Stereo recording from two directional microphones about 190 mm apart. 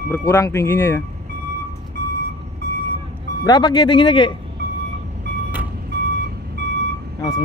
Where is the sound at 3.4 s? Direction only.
20° left (ahead or behind).